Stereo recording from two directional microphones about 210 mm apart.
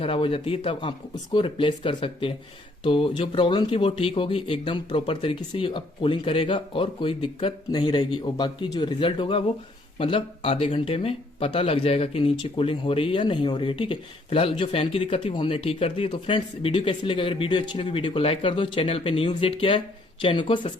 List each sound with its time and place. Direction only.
0.0 s speech: 25° left (ahead or behind)